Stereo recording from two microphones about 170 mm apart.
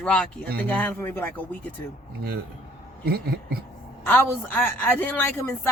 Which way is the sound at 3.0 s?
65° right (ahead or behind).